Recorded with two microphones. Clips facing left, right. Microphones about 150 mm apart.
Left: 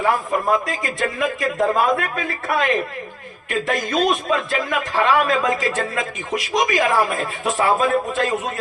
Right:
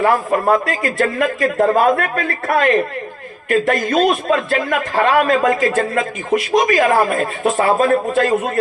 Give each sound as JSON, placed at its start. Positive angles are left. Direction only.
{"t": 0.0, "sound": "a man's voice", "side_deg": -60}